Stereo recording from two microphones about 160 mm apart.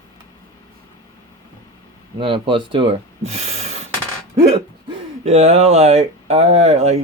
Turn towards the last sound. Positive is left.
turn(degrees=-45)  # may be behind; listen again after turning